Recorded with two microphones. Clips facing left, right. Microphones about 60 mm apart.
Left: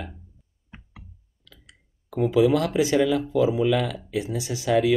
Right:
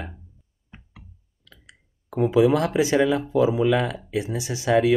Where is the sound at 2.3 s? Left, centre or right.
Right.